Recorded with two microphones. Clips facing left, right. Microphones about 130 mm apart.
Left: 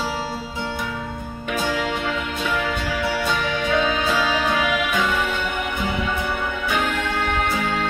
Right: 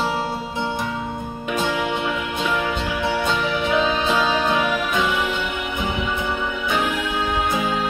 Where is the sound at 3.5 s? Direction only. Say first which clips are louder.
Even; 10° right (ahead or behind).